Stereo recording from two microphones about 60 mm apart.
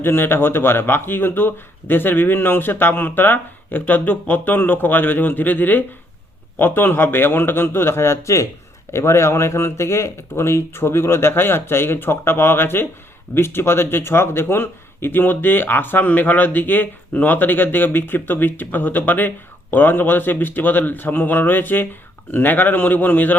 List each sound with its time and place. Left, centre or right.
0.0 s speech: left